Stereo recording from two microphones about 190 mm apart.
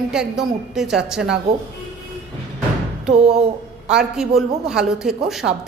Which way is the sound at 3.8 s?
5° right (ahead or behind).